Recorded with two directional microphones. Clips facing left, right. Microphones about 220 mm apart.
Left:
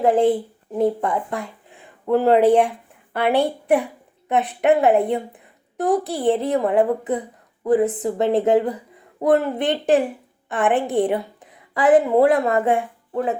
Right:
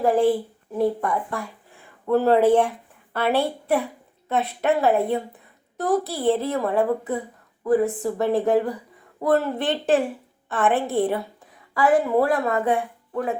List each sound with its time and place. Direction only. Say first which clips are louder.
0.0 s a woman's voice: left 2 dB; 20° left (ahead or behind)